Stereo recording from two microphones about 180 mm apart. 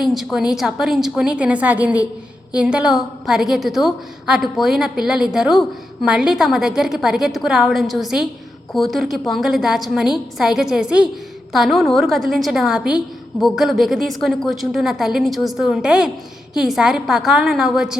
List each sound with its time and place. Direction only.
0.0 s a woman's voice: centre (ahead or behind)